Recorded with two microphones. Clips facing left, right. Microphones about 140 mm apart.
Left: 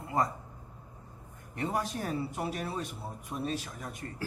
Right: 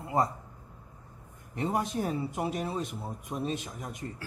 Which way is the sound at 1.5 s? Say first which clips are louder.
Right 3 dB; 25° right (ahead or behind).